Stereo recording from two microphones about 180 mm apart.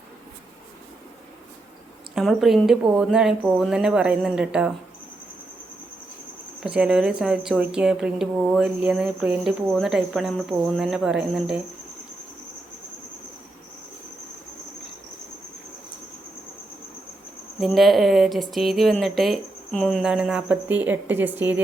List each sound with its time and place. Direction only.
2.1 s a woman's voice: centre (ahead or behind)
6.6 s a woman's voice: 5° right (ahead or behind)
17.6 s a woman's voice: centre (ahead or behind)